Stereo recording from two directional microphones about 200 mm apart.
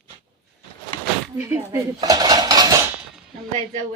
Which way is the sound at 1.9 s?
20° right (ahead or behind).